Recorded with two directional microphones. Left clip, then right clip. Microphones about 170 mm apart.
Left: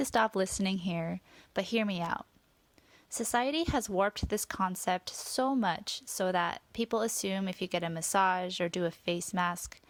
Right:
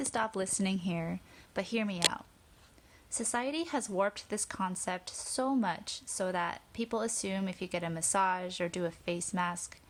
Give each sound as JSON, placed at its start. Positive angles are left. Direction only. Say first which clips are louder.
{"t": 0.0, "sound": "a woman's voice", "louder": "left 5 dB", "side_deg": 30}